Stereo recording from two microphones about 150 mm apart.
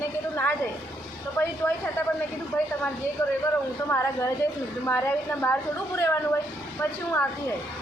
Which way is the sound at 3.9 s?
20° left (ahead or behind).